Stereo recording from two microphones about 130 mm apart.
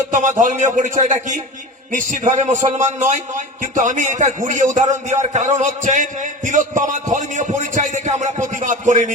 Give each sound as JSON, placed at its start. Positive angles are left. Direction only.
{"t": 0.1, "sound": "a man's voice", "side_deg": -70}